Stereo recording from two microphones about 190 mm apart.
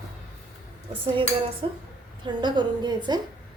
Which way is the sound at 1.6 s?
25° right (ahead or behind).